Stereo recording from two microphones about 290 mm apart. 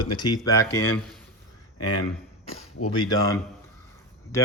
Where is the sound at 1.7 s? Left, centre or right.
Left.